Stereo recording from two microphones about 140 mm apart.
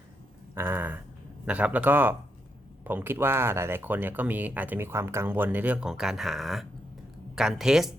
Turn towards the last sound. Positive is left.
turn(degrees=-5)  # may be behind; listen again after turning